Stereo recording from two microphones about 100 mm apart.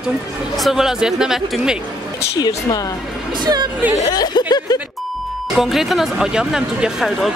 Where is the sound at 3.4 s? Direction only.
50° right (ahead or behind).